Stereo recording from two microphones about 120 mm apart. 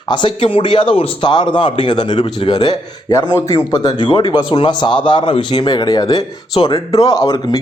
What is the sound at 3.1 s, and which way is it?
A man's voice, 25° left (ahead or behind).